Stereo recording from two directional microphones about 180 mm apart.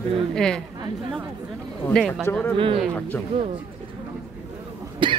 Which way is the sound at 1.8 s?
5° left (ahead or behind).